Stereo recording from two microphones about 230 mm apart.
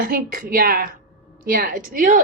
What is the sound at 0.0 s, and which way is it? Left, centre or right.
A woman's voice, right.